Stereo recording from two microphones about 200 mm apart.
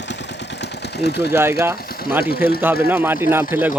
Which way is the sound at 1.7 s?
50° left (ahead or behind).